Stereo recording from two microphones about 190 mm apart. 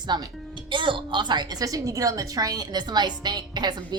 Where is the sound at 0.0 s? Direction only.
25° right (ahead or behind).